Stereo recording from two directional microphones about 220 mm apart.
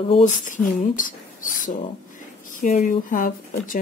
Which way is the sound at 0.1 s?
35° left (ahead or behind).